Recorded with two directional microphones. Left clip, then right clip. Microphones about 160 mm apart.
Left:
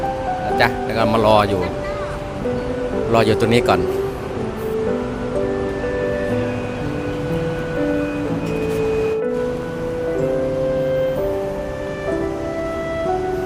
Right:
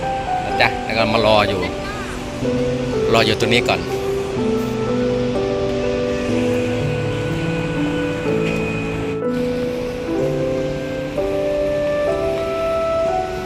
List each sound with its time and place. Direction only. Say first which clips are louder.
0.6 s speech: even; 15° left (ahead or behind)
3.1 s a man's voice: even; 20° left (ahead or behind)